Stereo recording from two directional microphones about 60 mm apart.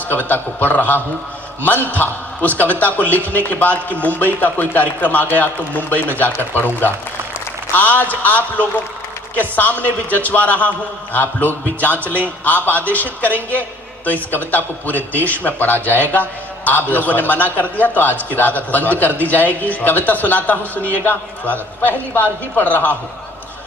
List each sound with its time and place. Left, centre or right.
0.1 s a man's voice: left